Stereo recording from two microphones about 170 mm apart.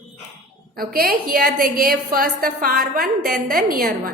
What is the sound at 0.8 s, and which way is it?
A woman's voice, 60° right (ahead or behind).